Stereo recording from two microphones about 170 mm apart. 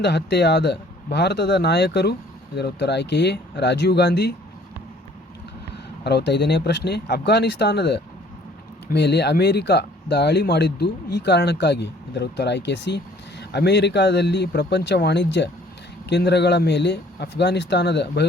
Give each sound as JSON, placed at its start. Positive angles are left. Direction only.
{"t": 0.0, "sound": "speech", "side_deg": 80}
{"t": 5.7, "sound": "speech", "side_deg": 80}